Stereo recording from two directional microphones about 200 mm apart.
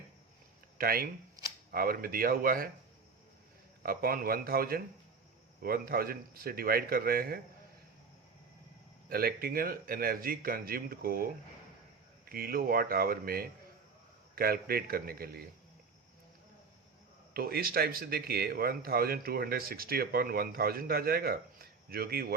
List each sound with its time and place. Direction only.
0.8 s speech: 50° right (ahead or behind)
3.8 s speech: 45° right (ahead or behind)
9.0 s speech: 50° right (ahead or behind)
17.3 s speech: 50° right (ahead or behind)